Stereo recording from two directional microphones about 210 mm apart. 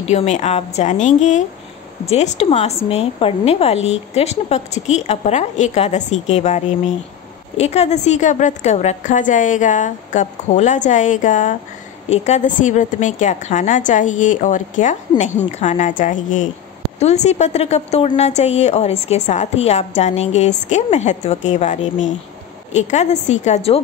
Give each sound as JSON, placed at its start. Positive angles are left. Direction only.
{"t": 0.0, "sound": "a woman's voice", "side_deg": 30}